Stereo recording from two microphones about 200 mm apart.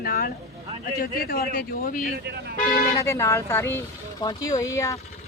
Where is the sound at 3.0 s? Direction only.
15° left (ahead or behind).